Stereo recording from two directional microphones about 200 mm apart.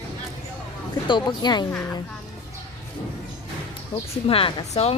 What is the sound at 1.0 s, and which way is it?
Speech, 20° left (ahead or behind).